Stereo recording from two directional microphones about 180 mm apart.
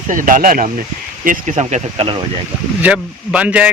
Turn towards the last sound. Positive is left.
turn(degrees=-5)  # may be behind; listen again after turning